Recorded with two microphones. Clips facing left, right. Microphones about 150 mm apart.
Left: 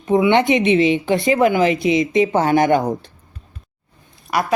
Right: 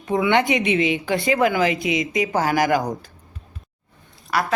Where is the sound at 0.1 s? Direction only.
20° left (ahead or behind).